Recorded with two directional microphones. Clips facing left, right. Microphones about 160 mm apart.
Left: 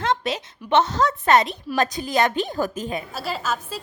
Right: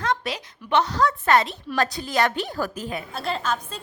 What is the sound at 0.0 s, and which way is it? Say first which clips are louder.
A woman's voice: left 3 dB; 25° left (ahead or behind).